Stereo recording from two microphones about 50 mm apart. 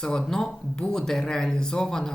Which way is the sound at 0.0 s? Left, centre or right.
Centre.